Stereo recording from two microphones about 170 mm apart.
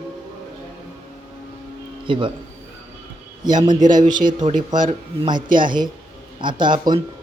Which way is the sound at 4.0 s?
45° right (ahead or behind).